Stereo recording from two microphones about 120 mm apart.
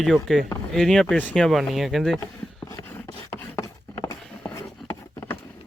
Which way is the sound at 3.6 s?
30° left (ahead or behind).